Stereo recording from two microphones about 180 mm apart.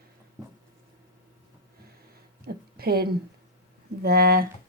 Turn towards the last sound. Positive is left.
turn(degrees=-60)  # may be behind; listen again after turning